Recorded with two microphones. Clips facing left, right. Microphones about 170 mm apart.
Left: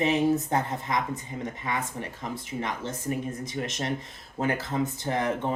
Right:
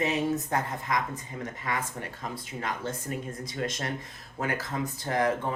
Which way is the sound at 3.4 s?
20° left (ahead or behind).